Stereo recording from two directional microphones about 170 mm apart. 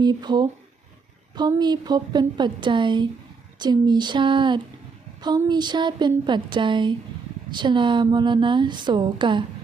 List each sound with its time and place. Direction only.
0.0 s a woman's voice: 25° right (ahead or behind)